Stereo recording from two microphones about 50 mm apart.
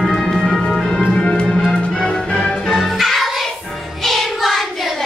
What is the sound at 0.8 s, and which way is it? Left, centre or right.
Music, centre.